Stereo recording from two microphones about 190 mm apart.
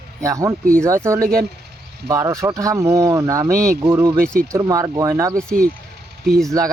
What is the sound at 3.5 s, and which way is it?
Speech, 50° right (ahead or behind).